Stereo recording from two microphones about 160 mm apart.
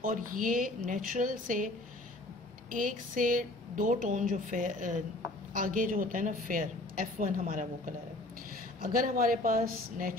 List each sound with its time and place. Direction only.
0.0 s a woman's voice: 60° right (ahead or behind)
2.7 s a woman's voice: 55° right (ahead or behind)